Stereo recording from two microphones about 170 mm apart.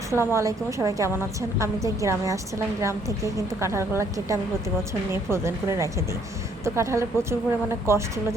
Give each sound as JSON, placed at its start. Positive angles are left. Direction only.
{"t": 0.1, "sound": "a woman's voice", "side_deg": -15}